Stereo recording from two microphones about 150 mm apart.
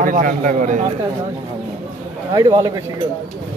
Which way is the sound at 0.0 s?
65° right (ahead or behind).